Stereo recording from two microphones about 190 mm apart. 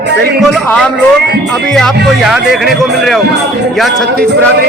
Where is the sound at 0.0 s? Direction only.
65° right (ahead or behind).